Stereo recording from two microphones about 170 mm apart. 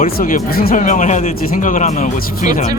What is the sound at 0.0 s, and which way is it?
Speech, 55° left (ahead or behind).